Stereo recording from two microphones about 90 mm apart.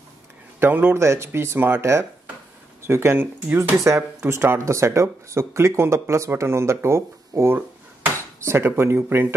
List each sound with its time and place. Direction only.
0.6 s speech: 25° right (ahead or behind)